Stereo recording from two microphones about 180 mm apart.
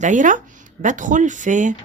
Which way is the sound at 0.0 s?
45° right (ahead or behind).